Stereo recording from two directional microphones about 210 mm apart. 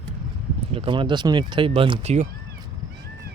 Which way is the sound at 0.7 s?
25° right (ahead or behind).